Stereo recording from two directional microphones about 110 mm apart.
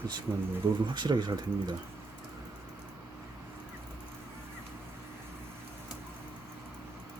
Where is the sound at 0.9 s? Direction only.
45° right (ahead or behind).